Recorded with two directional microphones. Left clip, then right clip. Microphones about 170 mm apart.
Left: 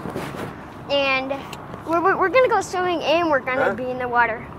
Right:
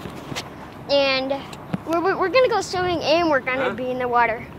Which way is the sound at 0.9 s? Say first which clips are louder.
Right 1 dB; 15° right (ahead or behind).